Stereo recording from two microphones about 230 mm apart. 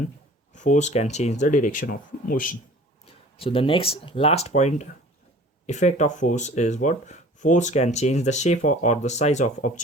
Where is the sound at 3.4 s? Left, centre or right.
Left.